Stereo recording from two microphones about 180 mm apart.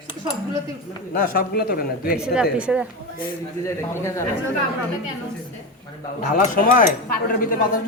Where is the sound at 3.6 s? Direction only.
15° left (ahead or behind).